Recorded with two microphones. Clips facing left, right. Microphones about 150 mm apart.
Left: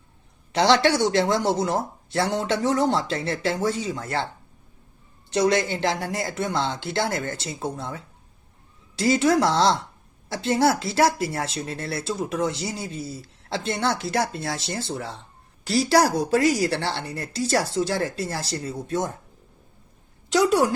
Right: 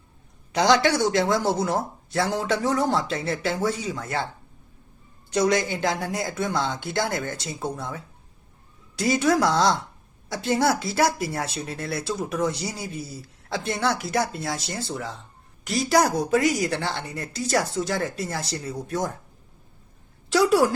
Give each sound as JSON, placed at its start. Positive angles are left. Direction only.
{"t": 0.5, "sound": "speech", "side_deg": 30}
{"t": 5.3, "sound": "a woman's voice", "side_deg": 25}
{"t": 20.3, "sound": "speech", "side_deg": 20}